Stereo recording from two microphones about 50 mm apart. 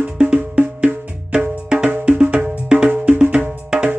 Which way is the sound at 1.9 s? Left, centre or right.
Right.